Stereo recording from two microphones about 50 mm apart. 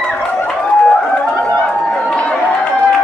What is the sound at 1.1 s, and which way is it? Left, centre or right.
Chatter, left.